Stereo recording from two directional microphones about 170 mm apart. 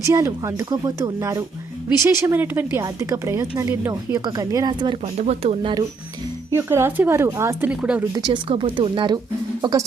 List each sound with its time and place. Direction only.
0.0 s a woman's voice: 15° right (ahead or behind)
5.1 s speech: 40° right (ahead or behind)
6.5 s speech: 15° right (ahead or behind)
8.1 s a woman's voice: 25° right (ahead or behind)